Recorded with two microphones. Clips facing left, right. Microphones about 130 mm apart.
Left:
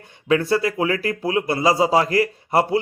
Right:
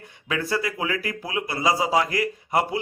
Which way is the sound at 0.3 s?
25° left (ahead or behind).